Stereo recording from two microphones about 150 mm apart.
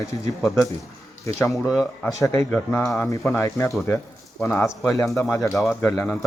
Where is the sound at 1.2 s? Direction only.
20° left (ahead or behind).